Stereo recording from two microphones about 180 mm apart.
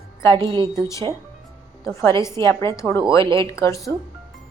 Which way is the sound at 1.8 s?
15° left (ahead or behind).